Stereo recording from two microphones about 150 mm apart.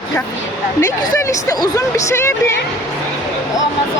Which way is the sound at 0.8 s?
20° left (ahead or behind).